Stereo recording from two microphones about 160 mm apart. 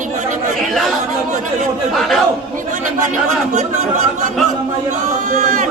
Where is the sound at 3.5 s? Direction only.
50° right (ahead or behind).